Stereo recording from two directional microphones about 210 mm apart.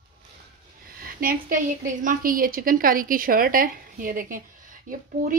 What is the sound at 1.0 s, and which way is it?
A woman's voice, 45° right (ahead or behind).